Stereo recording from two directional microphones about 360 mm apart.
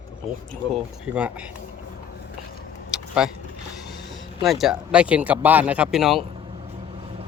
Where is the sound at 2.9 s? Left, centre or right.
Centre.